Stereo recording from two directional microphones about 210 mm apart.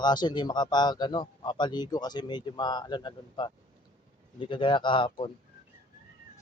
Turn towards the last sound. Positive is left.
turn(degrees=25)  # may be behind; listen again after turning